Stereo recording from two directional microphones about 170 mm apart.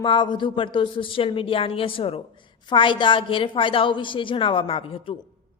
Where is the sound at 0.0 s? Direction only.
30° left (ahead or behind).